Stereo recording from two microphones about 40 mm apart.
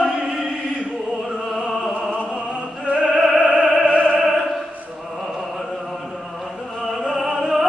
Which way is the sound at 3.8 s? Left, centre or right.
Right.